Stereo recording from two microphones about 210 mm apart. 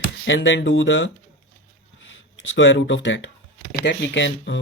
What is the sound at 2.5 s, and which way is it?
Speech, 60° left (ahead or behind).